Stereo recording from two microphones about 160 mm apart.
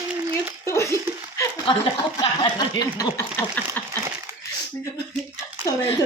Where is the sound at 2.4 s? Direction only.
25° left (ahead or behind).